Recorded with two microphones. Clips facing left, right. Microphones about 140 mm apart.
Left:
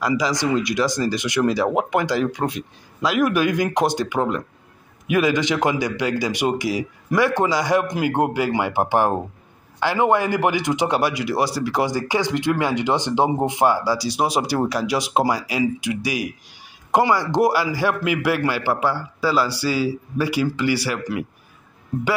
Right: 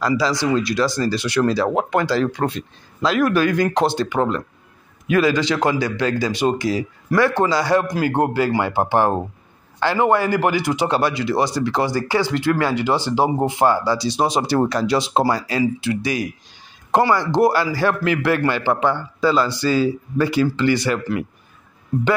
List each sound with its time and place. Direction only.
0.0 s speech: 15° left (ahead or behind)